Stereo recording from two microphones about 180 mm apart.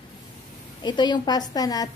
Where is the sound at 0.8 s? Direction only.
25° left (ahead or behind).